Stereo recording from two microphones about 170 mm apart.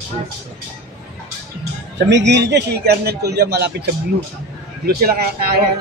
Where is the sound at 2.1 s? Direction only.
90° right; by 3.6 s 75° right (ahead or behind).